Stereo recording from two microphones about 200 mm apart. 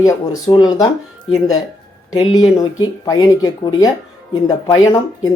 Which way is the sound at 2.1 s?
20° left (ahead or behind).